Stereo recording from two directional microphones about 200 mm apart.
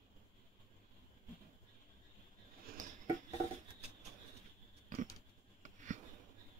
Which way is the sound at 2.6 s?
45° right (ahead or behind).